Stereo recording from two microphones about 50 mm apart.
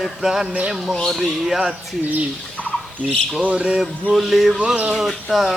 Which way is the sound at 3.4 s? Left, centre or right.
Right.